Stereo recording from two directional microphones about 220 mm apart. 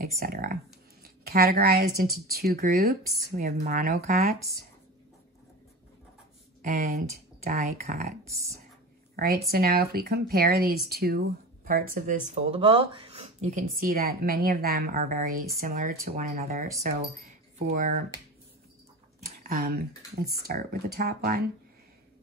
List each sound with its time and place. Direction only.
0.0 s speech: 40° right (ahead or behind)
6.6 s speech: 35° right (ahead or behind)
9.1 s speech: 45° right (ahead or behind)
19.2 s a sound: 45° right (ahead or behind)
20.3 s speech: 45° right (ahead or behind)